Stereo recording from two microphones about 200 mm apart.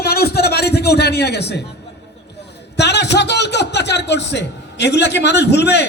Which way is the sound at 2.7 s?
55° left (ahead or behind).